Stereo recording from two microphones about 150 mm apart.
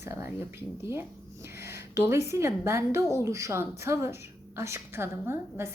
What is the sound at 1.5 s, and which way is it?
A woman's voice, 15° right (ahead or behind).